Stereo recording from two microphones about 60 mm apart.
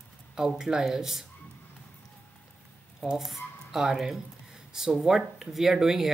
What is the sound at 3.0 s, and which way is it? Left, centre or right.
Speech, centre.